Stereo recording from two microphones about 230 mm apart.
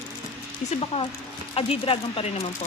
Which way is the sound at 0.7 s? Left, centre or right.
Left.